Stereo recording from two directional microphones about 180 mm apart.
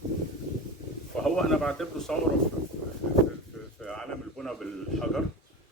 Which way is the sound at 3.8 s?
5° left (ahead or behind).